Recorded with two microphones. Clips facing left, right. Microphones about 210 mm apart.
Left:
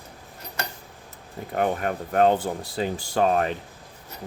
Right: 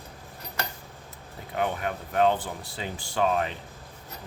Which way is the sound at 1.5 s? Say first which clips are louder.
Left 4 dB; 45° left (ahead or behind).